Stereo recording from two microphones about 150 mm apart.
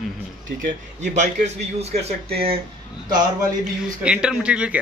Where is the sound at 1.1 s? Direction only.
50° right (ahead or behind).